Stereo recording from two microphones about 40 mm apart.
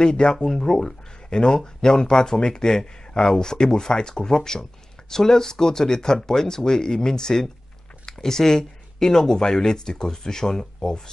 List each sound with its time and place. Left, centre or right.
0.0 s speech: centre